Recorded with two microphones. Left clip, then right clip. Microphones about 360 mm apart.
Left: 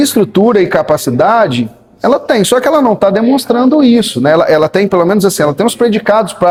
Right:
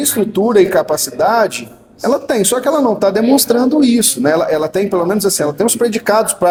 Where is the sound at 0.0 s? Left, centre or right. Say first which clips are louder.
Left 6 dB; left.